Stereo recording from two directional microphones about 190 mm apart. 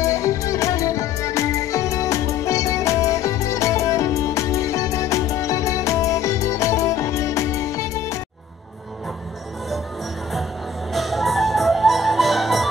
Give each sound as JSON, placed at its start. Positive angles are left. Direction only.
{"t": 0.0, "sound": "music", "side_deg": 15}
{"t": 10.9, "sound": "music", "side_deg": 0}